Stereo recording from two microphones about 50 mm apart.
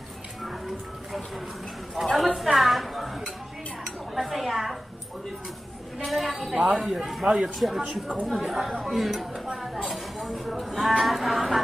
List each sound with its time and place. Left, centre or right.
2.0 s a woman's voice: centre
4.1 s dishes: centre
5.9 s a woman's voice: centre
7.2 s speech: centre
7.5 s a woman's voice: centre